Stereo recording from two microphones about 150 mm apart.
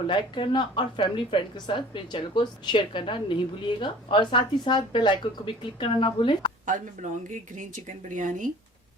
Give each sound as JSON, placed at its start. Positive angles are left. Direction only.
{"t": 0.1, "sound": "a woman's voice", "side_deg": 35}
{"t": 6.7, "sound": "speech", "side_deg": -55}